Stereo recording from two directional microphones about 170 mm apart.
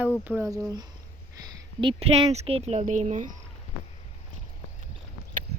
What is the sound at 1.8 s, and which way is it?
Speech, 35° right (ahead or behind).